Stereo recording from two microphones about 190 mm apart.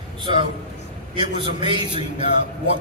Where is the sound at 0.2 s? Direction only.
25° right (ahead or behind).